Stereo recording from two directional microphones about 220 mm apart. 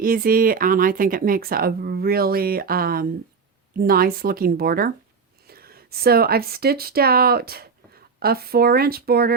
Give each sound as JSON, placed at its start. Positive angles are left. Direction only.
{"t": 0.0, "sound": "speech", "side_deg": -40}